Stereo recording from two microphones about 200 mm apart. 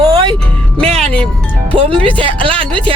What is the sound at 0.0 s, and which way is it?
Music, 20° right (ahead or behind).